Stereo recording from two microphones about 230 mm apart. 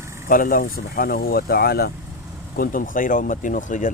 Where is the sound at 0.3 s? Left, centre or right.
Left.